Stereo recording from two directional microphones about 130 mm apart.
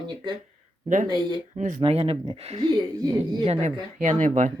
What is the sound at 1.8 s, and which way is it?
Speech, 50° right (ahead or behind).